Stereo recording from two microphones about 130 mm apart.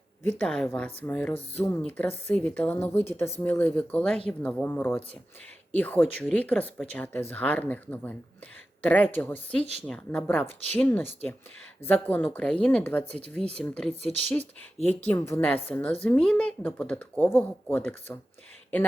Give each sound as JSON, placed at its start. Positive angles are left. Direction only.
{"t": 0.3, "sound": "speech", "side_deg": 10}
{"t": 6.0, "sound": "speech", "side_deg": 0}
{"t": 6.3, "sound": "speech", "side_deg": 10}
{"t": 10.4, "sound": "speech", "side_deg": -60}
{"t": 10.8, "sound": "speech", "side_deg": 15}
{"t": 13.9, "sound": "speech", "side_deg": -55}
{"t": 15.0, "sound": "speech", "side_deg": 20}